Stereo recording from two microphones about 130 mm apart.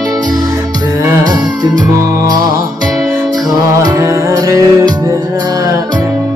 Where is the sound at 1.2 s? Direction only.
30° right (ahead or behind).